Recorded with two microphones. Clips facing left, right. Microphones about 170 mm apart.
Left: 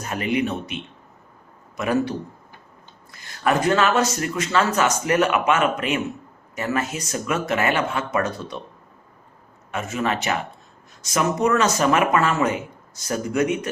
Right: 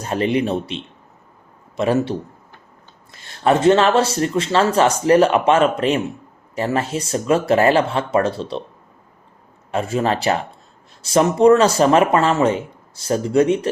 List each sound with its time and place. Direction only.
0.0 s a man's voice: 30° right (ahead or behind)
9.7 s speech: 30° right (ahead or behind)